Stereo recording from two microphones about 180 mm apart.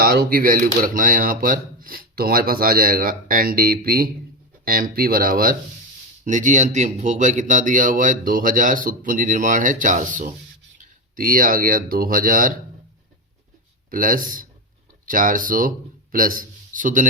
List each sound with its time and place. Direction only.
0.0 s speech: 55° right (ahead or behind)
13.9 s speech: 50° right (ahead or behind)